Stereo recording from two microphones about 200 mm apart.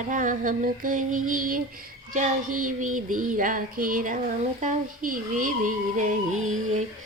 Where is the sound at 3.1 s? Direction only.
40° right (ahead or behind).